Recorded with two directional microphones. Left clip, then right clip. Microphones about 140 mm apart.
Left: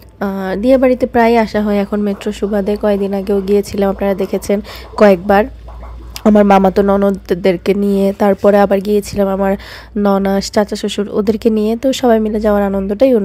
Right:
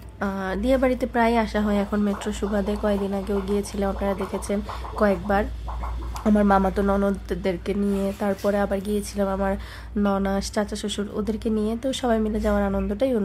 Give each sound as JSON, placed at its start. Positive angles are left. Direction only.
{"t": 0.2, "sound": "speech", "side_deg": 40}